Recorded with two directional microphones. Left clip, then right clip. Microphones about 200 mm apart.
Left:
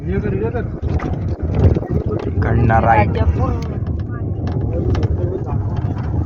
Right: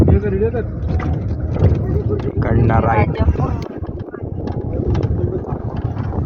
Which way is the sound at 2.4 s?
20° right (ahead or behind).